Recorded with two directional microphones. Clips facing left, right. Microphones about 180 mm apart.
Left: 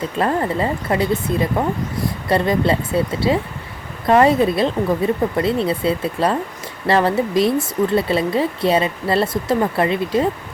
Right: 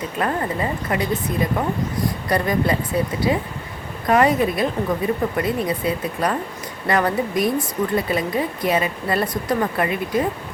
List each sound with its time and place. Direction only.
0.2 s speech: 30° left (ahead or behind)